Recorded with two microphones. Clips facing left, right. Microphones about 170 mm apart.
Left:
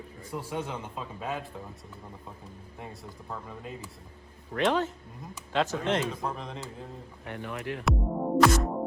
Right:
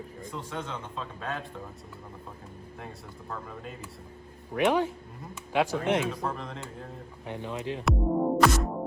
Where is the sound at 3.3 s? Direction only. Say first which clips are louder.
Even; centre (ahead or behind).